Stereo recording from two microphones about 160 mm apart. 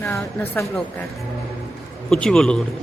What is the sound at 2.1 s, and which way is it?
Speech, 5° left (ahead or behind).